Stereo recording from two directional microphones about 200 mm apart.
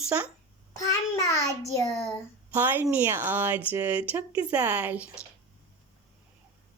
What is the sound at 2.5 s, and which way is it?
Speech, 10° right (ahead or behind).